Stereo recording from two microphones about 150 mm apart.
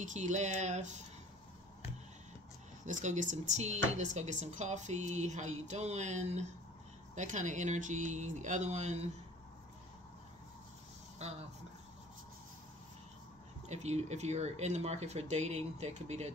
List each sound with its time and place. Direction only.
0.0 s speech: 55° right (ahead or behind)
2.8 s speech: 55° right (ahead or behind)
11.2 s speech: 45° right (ahead or behind)
13.7 s speech: 50° right (ahead or behind)